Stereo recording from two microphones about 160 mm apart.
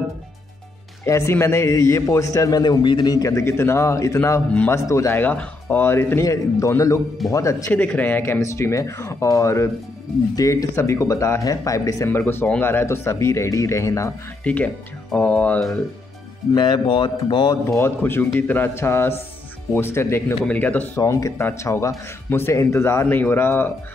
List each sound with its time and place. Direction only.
1.0 s a man's voice: 15° left (ahead or behind)
16.5 s a man's voice: 30° left (ahead or behind)
17.6 s a man's voice: 15° left (ahead or behind)